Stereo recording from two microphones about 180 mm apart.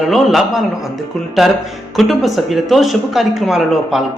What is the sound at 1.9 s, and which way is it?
A man's voice, centre (ahead or behind).